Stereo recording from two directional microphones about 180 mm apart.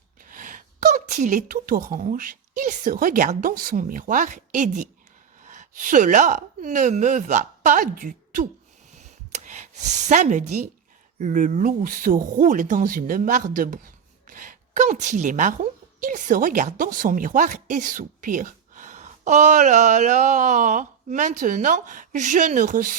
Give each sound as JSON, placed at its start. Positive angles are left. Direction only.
{"t": 0.3, "sound": "a woman's voice", "side_deg": -50}
{"t": 8.9, "sound": "a sound", "side_deg": -40}
{"t": 10.0, "sound": "a woman's voice", "side_deg": -40}